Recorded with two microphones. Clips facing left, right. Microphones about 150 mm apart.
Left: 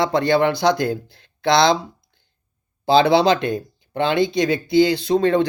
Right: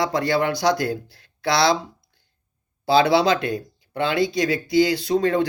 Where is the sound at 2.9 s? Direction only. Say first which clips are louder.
Left 2 dB; 25° left (ahead or behind).